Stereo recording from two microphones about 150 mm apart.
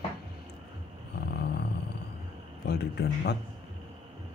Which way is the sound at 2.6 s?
90° left.